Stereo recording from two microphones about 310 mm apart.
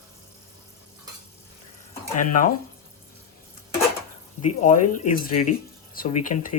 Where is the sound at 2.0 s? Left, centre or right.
Left.